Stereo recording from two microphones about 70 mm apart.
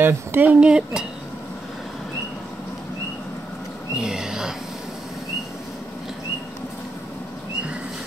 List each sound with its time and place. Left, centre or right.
0.0 s speech: right
0.6 s speech: centre
4.0 s speech: centre